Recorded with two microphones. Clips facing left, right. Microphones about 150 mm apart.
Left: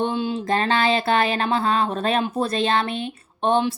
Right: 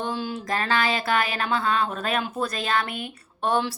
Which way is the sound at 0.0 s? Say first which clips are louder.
Left 6 dB; 25° left (ahead or behind).